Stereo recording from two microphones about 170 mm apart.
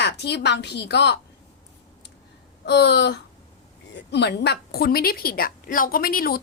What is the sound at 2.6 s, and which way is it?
A woman's voice, 80° left.